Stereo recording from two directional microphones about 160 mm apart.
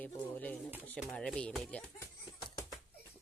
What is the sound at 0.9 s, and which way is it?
Speech, 5° left (ahead or behind).